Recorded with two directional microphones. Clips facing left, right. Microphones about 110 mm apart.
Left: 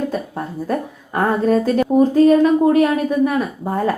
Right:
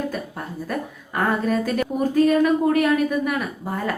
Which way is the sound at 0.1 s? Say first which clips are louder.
Left 6 dB; 30° left (ahead or behind).